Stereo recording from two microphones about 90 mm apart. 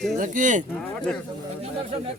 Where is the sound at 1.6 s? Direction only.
90° right.